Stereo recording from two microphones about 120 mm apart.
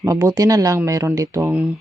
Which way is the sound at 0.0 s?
25° right (ahead or behind).